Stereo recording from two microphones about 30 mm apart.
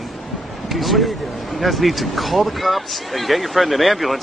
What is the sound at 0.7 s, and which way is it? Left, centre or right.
Speech, centre.